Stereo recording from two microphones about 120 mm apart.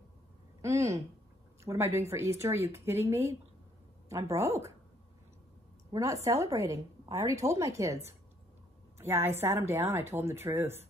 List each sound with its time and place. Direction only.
0.6 s a woman's voice: 25° right (ahead or behind)
5.9 s a woman's voice: 25° right (ahead or behind)